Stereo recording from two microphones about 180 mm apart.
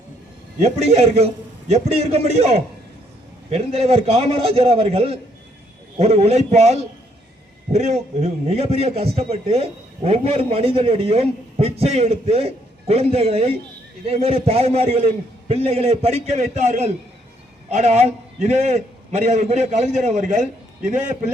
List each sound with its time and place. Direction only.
0.6 s a man's voice: 35° right (ahead or behind)